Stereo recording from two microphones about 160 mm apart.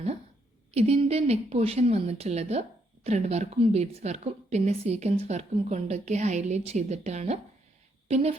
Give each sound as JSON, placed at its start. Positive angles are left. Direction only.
{"t": 0.7, "sound": "a woman's voice", "side_deg": -40}